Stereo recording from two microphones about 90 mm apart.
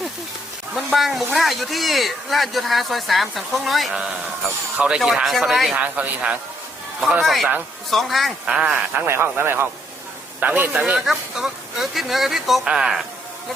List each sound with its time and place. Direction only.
0.9 s speech: centre (ahead or behind)
5.7 s a man's voice: 15° right (ahead or behind)
7.2 s speech: centre (ahead or behind)
8.4 s a man's voice: 10° right (ahead or behind)
9.0 s speech: 30° right (ahead or behind)
10.8 s speech: 10° right (ahead or behind)